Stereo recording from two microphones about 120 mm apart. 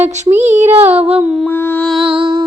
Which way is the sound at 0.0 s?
70° right (ahead or behind).